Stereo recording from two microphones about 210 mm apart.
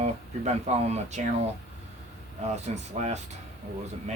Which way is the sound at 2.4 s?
30° right (ahead or behind).